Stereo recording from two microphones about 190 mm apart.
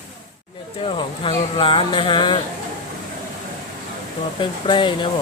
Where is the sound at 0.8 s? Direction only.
30° left (ahead or behind).